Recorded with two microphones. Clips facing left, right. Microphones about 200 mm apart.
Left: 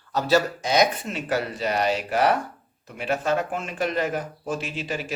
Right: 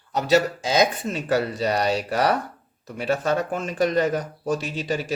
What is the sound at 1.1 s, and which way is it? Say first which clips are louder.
Speech: right 3 dB; 35° right (ahead or behind).